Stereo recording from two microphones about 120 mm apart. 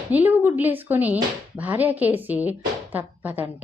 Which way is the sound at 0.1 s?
15° right (ahead or behind).